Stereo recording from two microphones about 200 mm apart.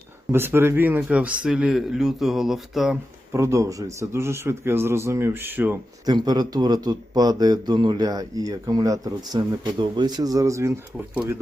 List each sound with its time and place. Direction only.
0.3 s a man's voice: 10° right (ahead or behind)
3.3 s speech: 15° right (ahead or behind)
6.1 s speech: 20° right (ahead or behind)